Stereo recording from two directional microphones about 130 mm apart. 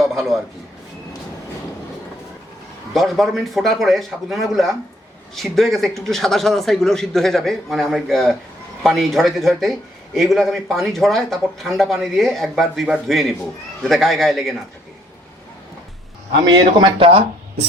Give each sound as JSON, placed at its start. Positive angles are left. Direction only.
{"t": 0.0, "sound": "a sound", "side_deg": 0}
{"t": 2.9, "sound": "speech", "side_deg": 0}
{"t": 16.5, "sound": "speech", "side_deg": -40}